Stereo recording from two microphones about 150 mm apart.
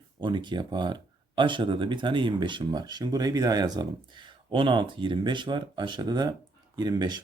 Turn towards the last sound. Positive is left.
turn(degrees=-30)  # may be behind; listen again after turning